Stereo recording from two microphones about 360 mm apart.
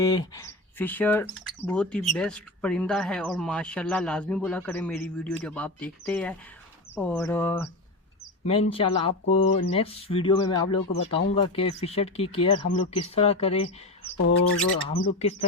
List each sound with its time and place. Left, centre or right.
0.0 s speech: centre
8.4 s speech: centre
14.8 s speech: centre